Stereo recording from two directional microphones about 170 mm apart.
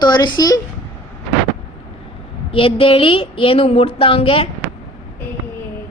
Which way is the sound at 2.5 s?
30° left (ahead or behind).